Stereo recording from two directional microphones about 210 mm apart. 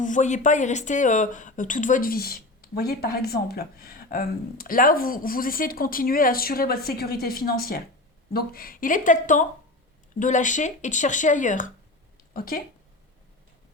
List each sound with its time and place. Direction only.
0.0 s speech: 35° left (ahead or behind)